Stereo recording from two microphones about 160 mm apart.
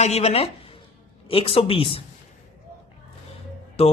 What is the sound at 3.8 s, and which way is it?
Speech, 40° left (ahead or behind).